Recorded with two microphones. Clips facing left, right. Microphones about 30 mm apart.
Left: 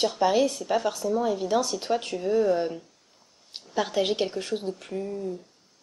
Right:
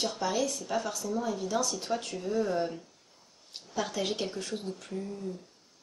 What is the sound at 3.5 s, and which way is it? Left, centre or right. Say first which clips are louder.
A woman's voice: left 7 dB; left.